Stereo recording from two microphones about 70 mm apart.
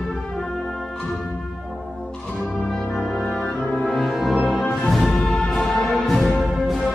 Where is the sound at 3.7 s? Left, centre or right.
Centre.